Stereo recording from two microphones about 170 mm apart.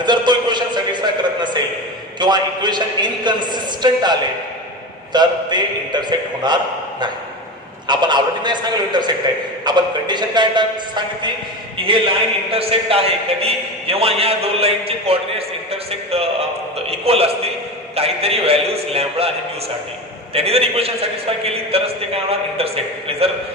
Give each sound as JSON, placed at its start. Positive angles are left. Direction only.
{"t": 0.0, "sound": "a sound", "side_deg": -25}
{"t": 2.1, "sound": "a woman's voice", "side_deg": -25}
{"t": 7.9, "sound": "a woman's voice", "side_deg": -25}
{"t": 20.3, "sound": "speech", "side_deg": -35}